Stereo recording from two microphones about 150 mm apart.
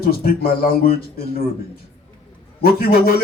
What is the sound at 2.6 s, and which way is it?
Speech, 80° left.